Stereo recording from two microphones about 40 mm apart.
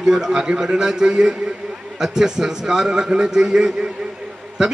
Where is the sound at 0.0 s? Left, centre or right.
Centre.